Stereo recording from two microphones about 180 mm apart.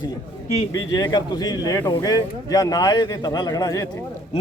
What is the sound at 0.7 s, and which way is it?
Speech, 20° left (ahead or behind).